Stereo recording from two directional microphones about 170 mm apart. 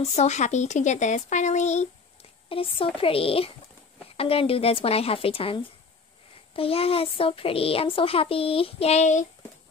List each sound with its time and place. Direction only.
0.0 s speech: 40° left (ahead or behind)
2.5 s speech: 35° left (ahead or behind)